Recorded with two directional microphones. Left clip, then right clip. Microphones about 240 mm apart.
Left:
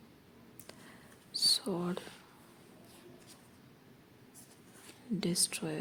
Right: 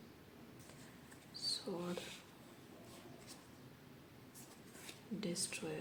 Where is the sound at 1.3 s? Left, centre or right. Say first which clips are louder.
Left 12 dB; left.